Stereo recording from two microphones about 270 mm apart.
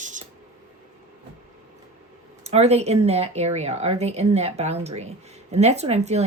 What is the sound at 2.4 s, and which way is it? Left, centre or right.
Speech, right.